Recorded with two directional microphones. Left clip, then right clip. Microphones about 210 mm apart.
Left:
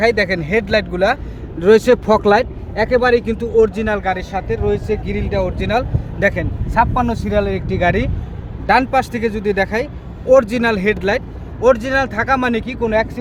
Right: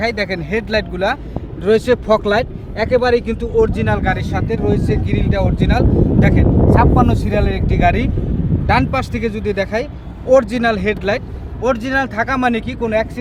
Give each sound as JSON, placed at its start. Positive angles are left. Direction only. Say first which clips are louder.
{"t": 0.0, "sound": "speech", "louder": "left 4 dB", "side_deg": 50}
{"t": 6.9, "sound": "speech", "louder": "right 1 dB", "side_deg": 30}